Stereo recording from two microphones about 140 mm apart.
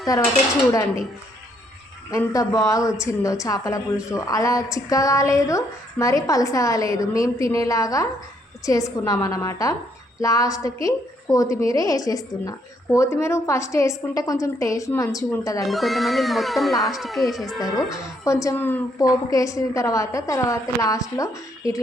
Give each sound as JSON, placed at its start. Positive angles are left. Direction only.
{"t": 2.0, "sound": "a woman's voice", "side_deg": 25}
{"t": 15.6, "sound": "speech", "side_deg": 0}
{"t": 17.9, "sound": "a woman's voice", "side_deg": 20}
{"t": 19.0, "sound": "a woman's voice", "side_deg": 25}